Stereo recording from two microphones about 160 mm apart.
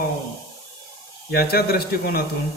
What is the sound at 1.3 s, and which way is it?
Speech, 80° left.